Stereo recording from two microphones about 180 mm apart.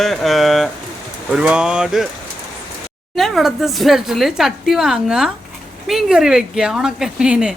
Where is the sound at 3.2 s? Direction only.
Centre (ahead or behind).